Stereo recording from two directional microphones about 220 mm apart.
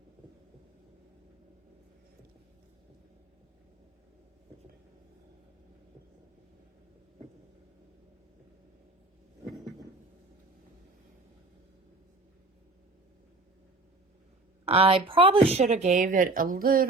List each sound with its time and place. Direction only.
14.6 s speech: 25° right (ahead or behind)